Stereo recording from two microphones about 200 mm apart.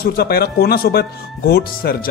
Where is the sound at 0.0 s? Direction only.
50° left (ahead or behind).